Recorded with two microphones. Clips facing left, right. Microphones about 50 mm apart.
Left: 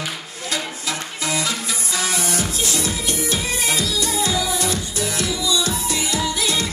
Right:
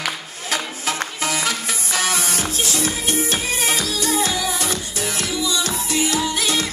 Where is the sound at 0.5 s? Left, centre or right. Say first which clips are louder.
Right 2 dB; right.